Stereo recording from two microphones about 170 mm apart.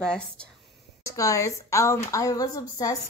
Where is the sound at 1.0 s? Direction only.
20° left (ahead or behind).